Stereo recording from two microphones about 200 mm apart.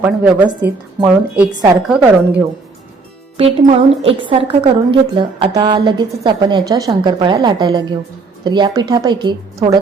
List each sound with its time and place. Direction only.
0.0 s a woman's voice: 5° right (ahead or behind)
3.3 s a woman's voice: 30° right (ahead or behind)